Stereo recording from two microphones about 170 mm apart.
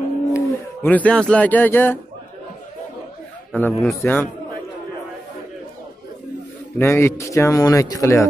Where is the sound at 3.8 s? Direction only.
15° left (ahead or behind).